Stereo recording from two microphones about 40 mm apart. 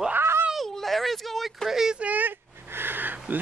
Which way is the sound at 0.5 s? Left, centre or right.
Centre.